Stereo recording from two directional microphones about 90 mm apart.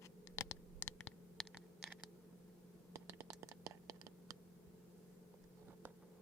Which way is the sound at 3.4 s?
40° right (ahead or behind).